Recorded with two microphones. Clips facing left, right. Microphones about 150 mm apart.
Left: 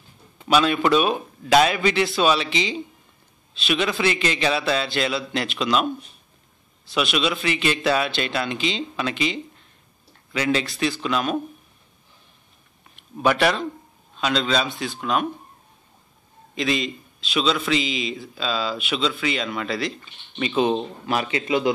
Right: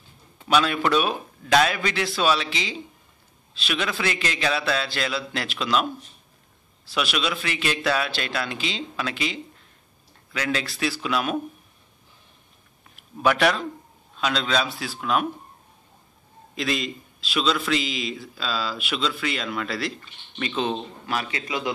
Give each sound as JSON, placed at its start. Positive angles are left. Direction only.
{"t": 0.5, "sound": "a man's voice", "side_deg": 5}
{"t": 6.9, "sound": "a man's voice", "side_deg": 0}
{"t": 12.9, "sound": "a man's voice", "side_deg": 0}
{"t": 16.5, "sound": "a man's voice", "side_deg": 0}
{"t": 21.0, "sound": "a man's voice", "side_deg": 20}